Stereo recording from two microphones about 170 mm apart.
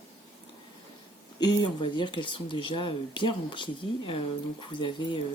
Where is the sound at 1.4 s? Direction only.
25° left (ahead or behind).